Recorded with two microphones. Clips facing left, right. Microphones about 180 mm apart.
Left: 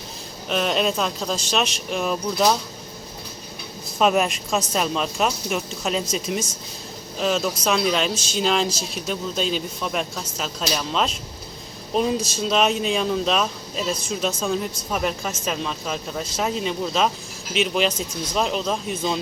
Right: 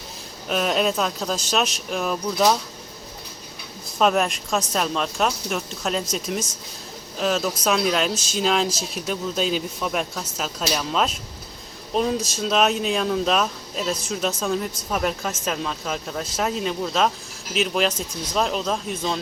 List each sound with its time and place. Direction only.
0.4 s speech: 5° right (ahead or behind)
3.9 s speech: 5° left (ahead or behind)